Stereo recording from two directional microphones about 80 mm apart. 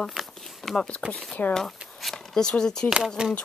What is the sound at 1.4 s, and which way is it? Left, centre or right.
Speech, centre.